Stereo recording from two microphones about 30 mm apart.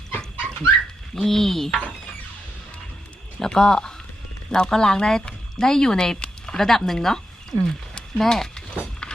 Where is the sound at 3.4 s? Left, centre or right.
Left.